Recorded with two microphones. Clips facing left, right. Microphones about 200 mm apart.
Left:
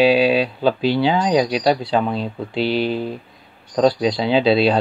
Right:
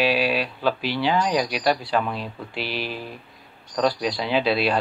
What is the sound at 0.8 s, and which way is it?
Speech, 25° left (ahead or behind).